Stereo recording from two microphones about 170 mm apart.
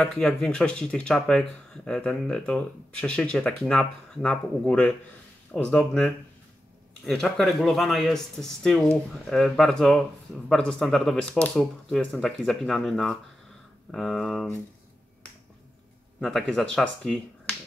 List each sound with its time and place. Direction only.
0.0 s speech: 5° left (ahead or behind)
16.2 s speech: centre (ahead or behind)